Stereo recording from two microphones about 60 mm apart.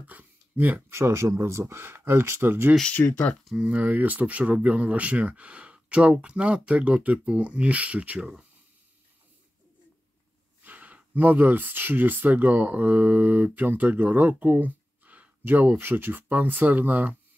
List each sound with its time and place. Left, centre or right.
0.0 s a sound: right
0.8 s speech: right
2.9 s speech: left
3.6 s speech: right
10.6 s speech: right